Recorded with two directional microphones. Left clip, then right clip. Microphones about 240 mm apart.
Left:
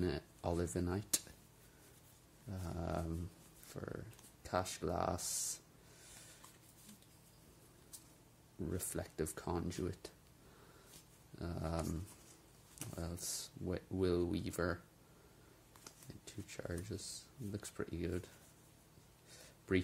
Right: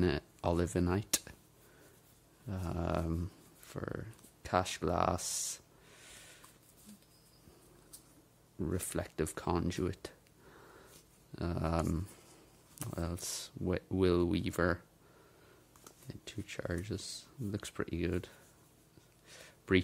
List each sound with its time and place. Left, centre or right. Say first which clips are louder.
0.0 s speech: right 7 dB; right
2.5 s speech: right 6 dB; right
3.6 s a sound: right 6 dB; right
8.6 s speech: right 6 dB; right
11.3 s speech: right 7 dB; right
16.1 s speech: right 8 dB; right
19.2 s a sound: right 6 dB; right